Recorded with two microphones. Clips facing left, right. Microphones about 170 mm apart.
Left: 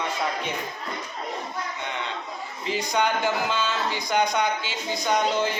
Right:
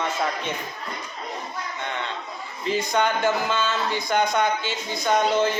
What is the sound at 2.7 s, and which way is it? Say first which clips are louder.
Speech: right 2 dB; 15° left (ahead or behind).